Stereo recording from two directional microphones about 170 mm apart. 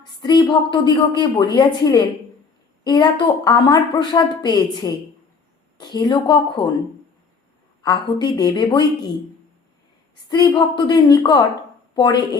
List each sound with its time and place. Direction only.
0.2 s a woman's voice: 25° left (ahead or behind)
7.8 s a woman's voice: 25° left (ahead or behind)
10.2 s a woman's voice: 25° left (ahead or behind)